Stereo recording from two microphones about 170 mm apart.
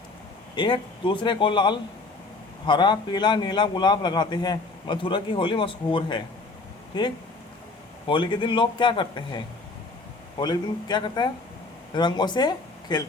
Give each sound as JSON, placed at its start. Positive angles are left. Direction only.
{"t": 0.5, "sound": "a man's voice", "side_deg": 30}